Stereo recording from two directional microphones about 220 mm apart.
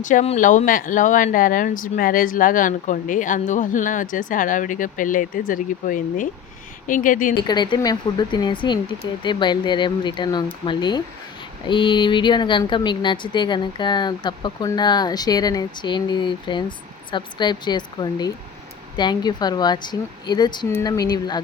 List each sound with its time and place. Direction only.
0.0 s speech: 35° left (ahead or behind)
7.4 s speech: 20° left (ahead or behind)